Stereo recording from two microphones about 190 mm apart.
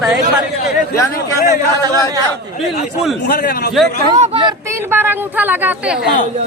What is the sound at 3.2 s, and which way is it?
Speech, 50° left (ahead or behind).